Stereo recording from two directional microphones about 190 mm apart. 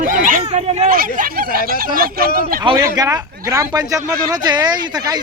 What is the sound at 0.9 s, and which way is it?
Speech, 50° right (ahead or behind).